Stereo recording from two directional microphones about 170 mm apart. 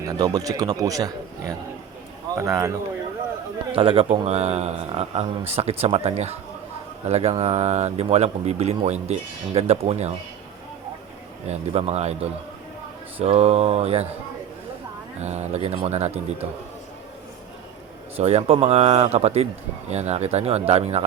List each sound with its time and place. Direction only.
0.0 s speech: 20° right (ahead or behind)
3.8 s speech: 35° right (ahead or behind)
11.4 s speech: 35° right (ahead or behind)
15.2 s speech: 40° right (ahead or behind)
18.2 s speech: 40° right (ahead or behind)